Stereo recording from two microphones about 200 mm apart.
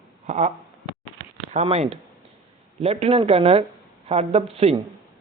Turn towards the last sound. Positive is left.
turn(degrees=-30)  # may be behind; listen again after turning